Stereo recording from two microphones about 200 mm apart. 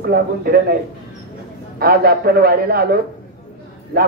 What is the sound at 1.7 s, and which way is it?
A woman's voice, 50° right (ahead or behind).